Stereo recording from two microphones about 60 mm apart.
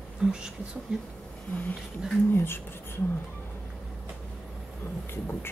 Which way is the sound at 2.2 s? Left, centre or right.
Left.